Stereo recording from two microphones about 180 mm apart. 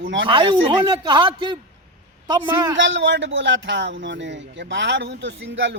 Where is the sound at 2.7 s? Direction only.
90° right.